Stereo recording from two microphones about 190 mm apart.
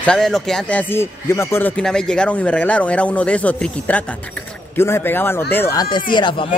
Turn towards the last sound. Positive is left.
turn(degrees=25)  # may be behind; listen again after turning